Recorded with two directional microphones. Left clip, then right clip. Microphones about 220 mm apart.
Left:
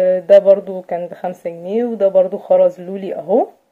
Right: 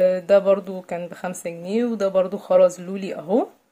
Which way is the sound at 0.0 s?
15° right (ahead or behind).